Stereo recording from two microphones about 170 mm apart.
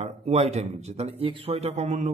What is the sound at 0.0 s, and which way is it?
A man's voice, 40° right (ahead or behind).